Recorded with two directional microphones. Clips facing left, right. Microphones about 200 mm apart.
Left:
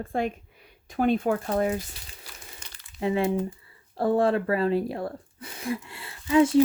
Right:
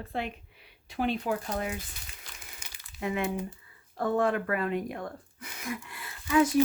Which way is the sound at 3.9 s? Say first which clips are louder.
Left 5 dB; 30° left (ahead or behind).